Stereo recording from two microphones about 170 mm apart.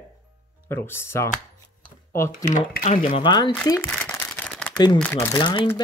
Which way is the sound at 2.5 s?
50° left (ahead or behind).